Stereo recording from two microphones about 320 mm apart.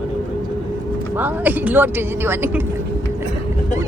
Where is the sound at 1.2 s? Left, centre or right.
Centre.